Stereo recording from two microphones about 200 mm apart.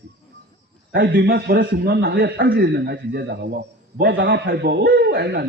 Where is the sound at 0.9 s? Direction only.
60° right (ahead or behind).